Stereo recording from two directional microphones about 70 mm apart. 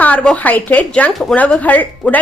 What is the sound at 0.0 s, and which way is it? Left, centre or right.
A woman's voice, left.